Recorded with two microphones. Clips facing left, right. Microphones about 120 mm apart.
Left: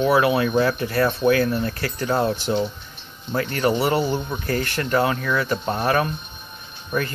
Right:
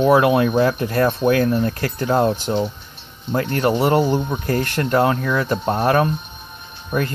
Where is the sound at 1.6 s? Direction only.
40° right (ahead or behind).